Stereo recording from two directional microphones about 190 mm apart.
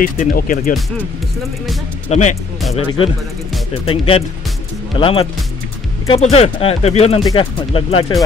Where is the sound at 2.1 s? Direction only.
35° left (ahead or behind).